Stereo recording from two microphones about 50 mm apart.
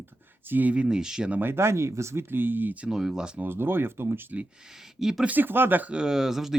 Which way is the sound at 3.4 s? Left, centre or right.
Right.